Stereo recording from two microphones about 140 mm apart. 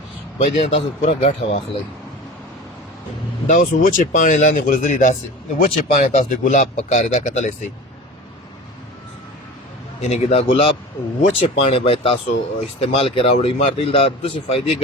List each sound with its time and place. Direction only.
0.3 s speech: 45° left (ahead or behind)
3.4 s speech: 65° left (ahead or behind)
10.0 s speech: 50° left (ahead or behind)